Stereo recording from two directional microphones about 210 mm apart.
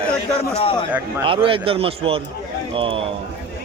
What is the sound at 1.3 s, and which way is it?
A man's voice, 25° right (ahead or behind).